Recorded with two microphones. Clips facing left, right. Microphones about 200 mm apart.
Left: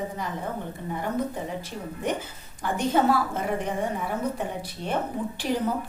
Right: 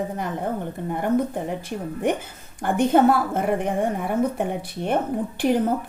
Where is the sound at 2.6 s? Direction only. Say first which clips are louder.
Right 6 dB; 55° right (ahead or behind).